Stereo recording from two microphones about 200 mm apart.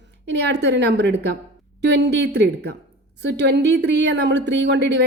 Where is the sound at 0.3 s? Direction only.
60° right (ahead or behind).